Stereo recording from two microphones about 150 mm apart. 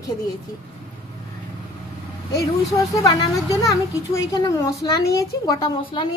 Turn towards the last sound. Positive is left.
turn(degrees=35)  # may be behind; listen again after turning